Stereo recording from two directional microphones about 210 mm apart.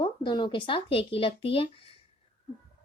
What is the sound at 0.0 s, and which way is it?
Speech, 20° left (ahead or behind).